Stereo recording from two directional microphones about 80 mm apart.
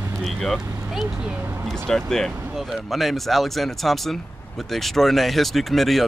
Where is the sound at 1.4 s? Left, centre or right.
Right.